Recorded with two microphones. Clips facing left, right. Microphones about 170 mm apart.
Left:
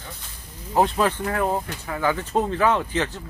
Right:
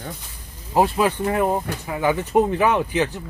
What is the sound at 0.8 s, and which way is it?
Speech, 10° right (ahead or behind).